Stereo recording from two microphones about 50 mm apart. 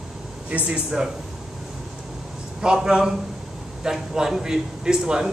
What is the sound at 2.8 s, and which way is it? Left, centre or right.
A man's voice, centre.